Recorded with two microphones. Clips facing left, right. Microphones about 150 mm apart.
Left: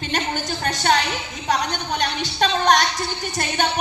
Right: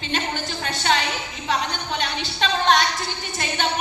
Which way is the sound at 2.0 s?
45° left (ahead or behind).